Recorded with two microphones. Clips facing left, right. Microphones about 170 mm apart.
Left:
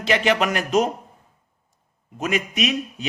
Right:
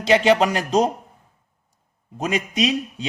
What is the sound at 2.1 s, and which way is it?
Speech, 35° right (ahead or behind).